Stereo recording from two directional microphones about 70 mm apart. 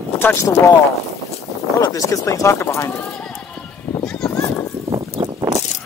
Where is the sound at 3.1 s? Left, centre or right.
Centre.